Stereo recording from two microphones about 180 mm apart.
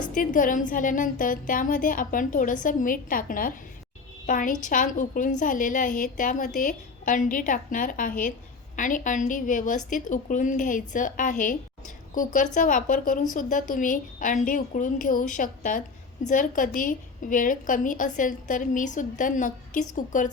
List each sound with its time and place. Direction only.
0.1 s a woman's voice: 50° left (ahead or behind)